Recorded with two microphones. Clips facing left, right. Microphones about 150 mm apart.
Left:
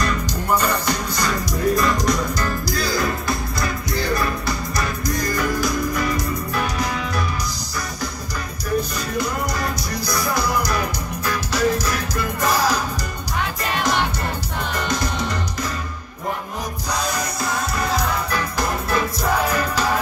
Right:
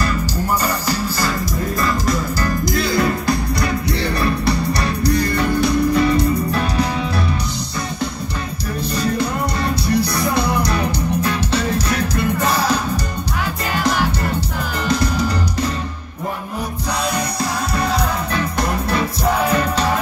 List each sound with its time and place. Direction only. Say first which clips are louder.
0.6 s music: right 1 dB; 10° right (ahead or behind)
2.6 s music: right 7 dB; 25° right (ahead or behind)
8.9 s music: right 4 dB; 30° right (ahead or behind)
17.7 s music: right 4 dB; 30° right (ahead or behind)